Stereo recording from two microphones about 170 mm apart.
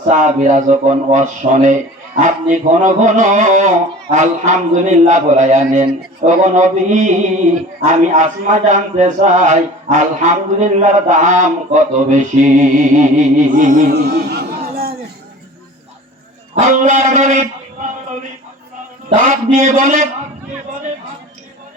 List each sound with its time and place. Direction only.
0.1 s a man's voice: 50° right (ahead or behind)
13.9 s a sound: 70° right (ahead or behind)
16.6 s a man's voice: 45° right (ahead or behind)
19.1 s a man's voice: 50° right (ahead or behind)